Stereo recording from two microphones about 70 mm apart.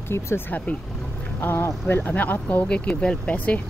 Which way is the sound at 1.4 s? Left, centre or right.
Left.